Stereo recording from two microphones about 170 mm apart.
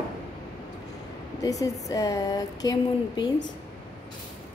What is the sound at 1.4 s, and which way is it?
Speech, 20° left (ahead or behind).